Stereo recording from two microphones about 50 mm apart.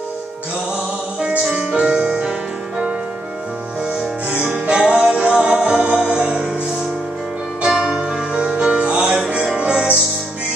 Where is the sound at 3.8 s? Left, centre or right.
Centre.